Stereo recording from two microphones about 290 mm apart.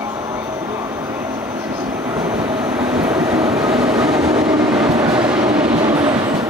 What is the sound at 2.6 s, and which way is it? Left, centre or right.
Train, centre.